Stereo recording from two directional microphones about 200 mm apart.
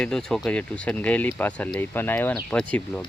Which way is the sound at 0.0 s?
5° left (ahead or behind).